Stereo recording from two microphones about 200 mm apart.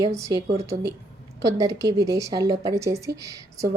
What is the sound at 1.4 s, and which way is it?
Speech, 15° right (ahead or behind).